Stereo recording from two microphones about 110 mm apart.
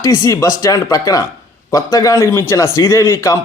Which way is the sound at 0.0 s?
30° left (ahead or behind).